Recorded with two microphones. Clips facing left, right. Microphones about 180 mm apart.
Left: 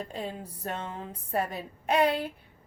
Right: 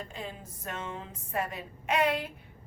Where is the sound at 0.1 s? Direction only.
35° left (ahead or behind).